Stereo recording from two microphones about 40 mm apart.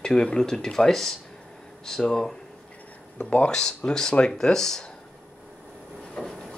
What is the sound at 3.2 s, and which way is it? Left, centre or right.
Speech, left.